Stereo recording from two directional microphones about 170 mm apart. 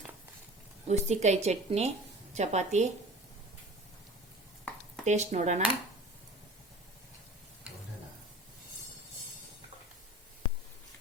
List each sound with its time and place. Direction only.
0.9 s a woman's voice: 40° right (ahead or behind)
5.0 s a woman's voice: 45° right (ahead or behind)